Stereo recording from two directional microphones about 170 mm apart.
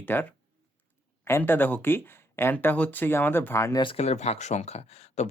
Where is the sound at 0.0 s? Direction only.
10° left (ahead or behind).